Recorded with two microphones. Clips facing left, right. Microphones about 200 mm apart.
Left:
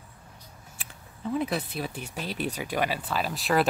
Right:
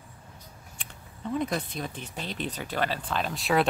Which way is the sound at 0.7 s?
5° left (ahead or behind).